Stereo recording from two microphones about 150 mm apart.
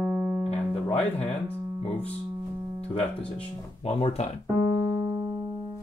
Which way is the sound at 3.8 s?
40° left (ahead or behind).